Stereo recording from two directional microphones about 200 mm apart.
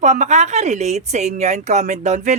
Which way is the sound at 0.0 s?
35° right (ahead or behind).